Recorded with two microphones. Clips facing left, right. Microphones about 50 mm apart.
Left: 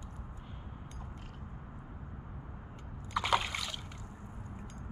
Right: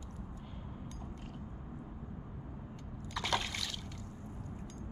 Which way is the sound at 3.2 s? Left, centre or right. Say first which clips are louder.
Left 5 dB; centre.